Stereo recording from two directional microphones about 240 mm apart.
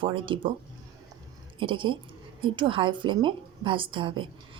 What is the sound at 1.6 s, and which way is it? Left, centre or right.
Speech, right.